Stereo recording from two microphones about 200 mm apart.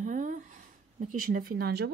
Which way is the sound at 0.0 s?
40° right (ahead or behind).